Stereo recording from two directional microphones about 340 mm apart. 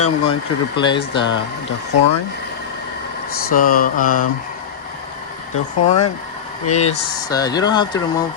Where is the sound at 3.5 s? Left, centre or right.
Left.